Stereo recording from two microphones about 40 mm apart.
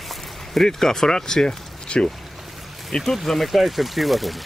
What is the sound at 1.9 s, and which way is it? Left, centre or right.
Speech, left.